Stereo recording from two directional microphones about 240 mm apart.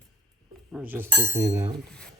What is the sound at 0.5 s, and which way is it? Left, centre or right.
Speech, centre.